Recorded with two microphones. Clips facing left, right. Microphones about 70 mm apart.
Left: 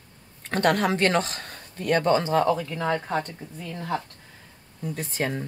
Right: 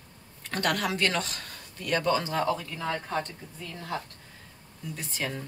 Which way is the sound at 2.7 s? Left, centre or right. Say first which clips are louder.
Left 6 dB; left.